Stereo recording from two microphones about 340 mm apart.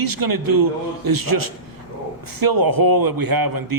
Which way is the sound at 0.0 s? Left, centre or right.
Right.